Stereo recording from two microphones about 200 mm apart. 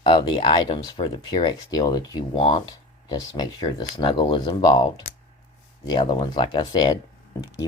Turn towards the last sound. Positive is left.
turn(degrees=20)  # may be behind; listen again after turning